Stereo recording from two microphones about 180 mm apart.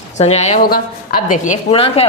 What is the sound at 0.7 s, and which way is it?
A woman's voice, 50° left (ahead or behind).